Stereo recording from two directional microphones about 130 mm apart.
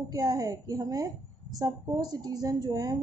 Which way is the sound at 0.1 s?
30° right (ahead or behind).